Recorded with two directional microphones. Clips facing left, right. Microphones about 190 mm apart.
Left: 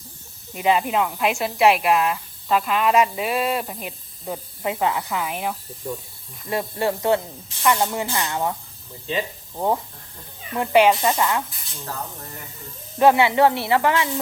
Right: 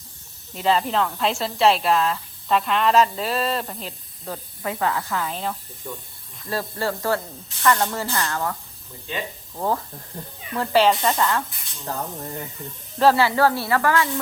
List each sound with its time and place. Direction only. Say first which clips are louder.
0.5 s speech: left 1 dB; 10° left (ahead or behind)
2.5 s speech: even; 5° left (ahead or behind)
5.8 s speech: left 5 dB; 30° left (ahead or behind)
9.6 s speech: left 2 dB; 20° left (ahead or behind)
13.0 s speech: left 2 dB; 20° left (ahead or behind)